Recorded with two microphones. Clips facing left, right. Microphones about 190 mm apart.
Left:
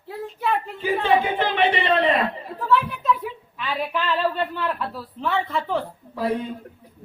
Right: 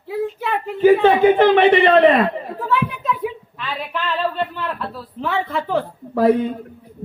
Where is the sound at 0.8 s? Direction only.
55° right (ahead or behind).